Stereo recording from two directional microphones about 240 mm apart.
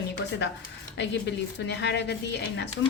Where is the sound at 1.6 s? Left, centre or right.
Left.